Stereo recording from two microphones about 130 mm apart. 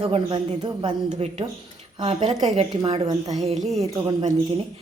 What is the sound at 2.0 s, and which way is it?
Speech, 40° right (ahead or behind).